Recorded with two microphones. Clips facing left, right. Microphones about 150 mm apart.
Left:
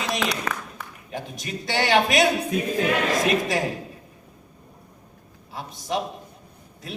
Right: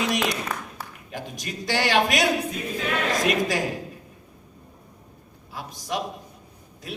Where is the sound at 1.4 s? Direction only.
25° left (ahead or behind).